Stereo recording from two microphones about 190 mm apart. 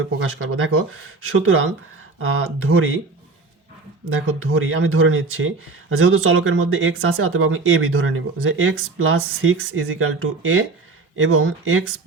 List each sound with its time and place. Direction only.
0.0 s speech: 90° right
4.3 s speech: 90° right